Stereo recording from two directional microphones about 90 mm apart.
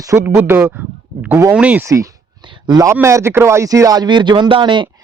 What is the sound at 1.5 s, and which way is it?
Speech, 15° right (ahead or behind).